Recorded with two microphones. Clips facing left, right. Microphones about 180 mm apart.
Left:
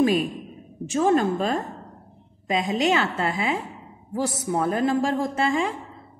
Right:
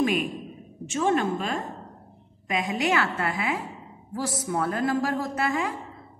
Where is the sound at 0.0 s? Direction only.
35° left (ahead or behind).